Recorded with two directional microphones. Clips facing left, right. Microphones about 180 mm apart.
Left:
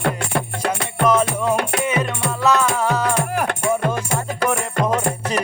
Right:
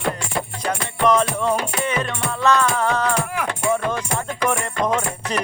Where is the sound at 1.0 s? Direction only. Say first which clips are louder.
Even; 5° left (ahead or behind).